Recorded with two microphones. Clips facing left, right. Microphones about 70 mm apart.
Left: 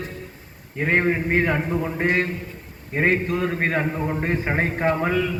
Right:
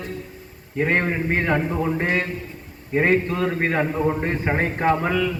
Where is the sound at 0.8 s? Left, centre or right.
Centre.